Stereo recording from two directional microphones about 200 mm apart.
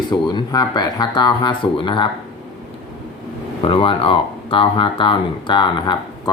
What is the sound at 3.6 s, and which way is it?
Speech, 25° left (ahead or behind).